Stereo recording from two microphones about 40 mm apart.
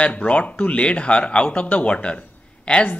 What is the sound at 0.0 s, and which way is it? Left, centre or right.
A man's voice, left.